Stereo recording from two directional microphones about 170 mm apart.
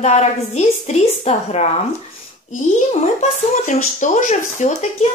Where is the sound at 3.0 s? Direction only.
45° left (ahead or behind).